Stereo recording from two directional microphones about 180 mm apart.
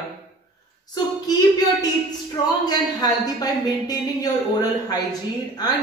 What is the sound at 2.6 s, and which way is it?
Speech, 20° left (ahead or behind).